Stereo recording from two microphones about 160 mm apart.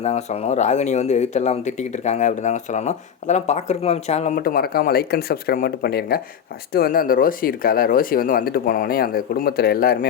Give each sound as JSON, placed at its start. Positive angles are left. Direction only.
{"t": 0.0, "sound": "speech", "side_deg": 45}
{"t": 4.4, "sound": "speech", "side_deg": 70}